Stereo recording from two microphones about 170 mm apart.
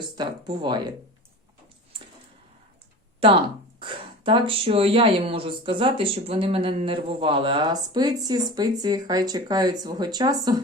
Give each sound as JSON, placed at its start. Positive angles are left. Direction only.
{"t": 0.2, "sound": "speech", "side_deg": -25}
{"t": 3.8, "sound": "speech", "side_deg": -30}